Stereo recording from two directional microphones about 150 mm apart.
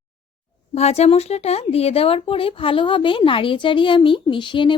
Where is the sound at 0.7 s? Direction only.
45° left (ahead or behind).